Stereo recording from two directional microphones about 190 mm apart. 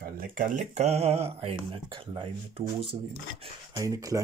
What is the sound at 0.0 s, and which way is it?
Speech, 45° right (ahead or behind).